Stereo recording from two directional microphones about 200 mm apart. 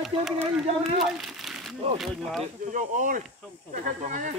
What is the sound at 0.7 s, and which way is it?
Speech, 30° right (ahead or behind).